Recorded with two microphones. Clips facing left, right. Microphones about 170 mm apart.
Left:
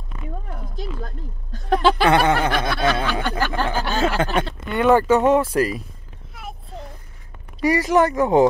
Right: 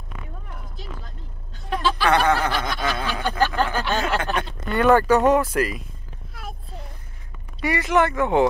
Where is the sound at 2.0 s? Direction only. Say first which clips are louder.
Left 2 dB; 20° left (ahead or behind).